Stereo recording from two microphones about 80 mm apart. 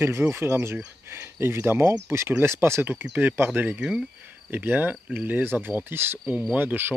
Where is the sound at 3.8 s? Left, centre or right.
Centre.